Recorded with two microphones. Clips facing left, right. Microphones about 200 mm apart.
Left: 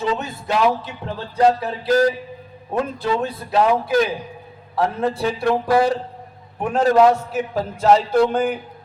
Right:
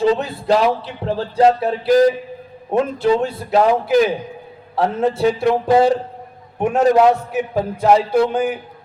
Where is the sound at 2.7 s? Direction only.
25° right (ahead or behind).